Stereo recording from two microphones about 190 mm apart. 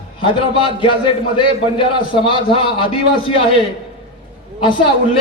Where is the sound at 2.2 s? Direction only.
25° left (ahead or behind).